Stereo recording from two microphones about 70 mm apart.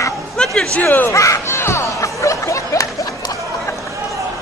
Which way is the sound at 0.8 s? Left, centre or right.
Left.